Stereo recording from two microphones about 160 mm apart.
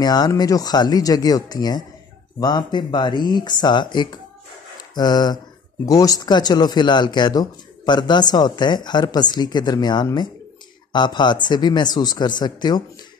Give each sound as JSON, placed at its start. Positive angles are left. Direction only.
{"t": 0.0, "sound": "speech", "side_deg": 25}